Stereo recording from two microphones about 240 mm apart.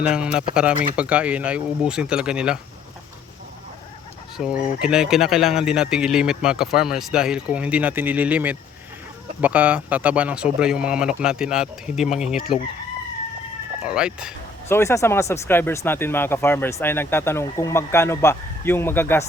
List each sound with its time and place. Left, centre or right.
0.0 s speech: centre
4.4 s speech: centre
13.8 s speech: centre
14.7 s speech: centre